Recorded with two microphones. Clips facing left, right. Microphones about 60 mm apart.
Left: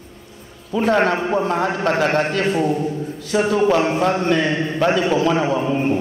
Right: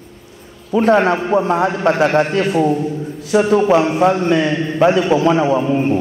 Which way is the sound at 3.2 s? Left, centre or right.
Centre.